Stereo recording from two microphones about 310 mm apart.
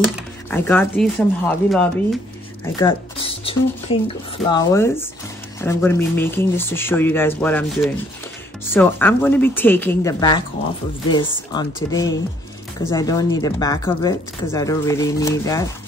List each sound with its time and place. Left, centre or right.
0.0 s speech: centre
11.5 s speech: centre